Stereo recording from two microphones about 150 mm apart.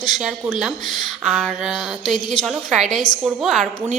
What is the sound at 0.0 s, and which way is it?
A woman's voice, centre (ahead or behind).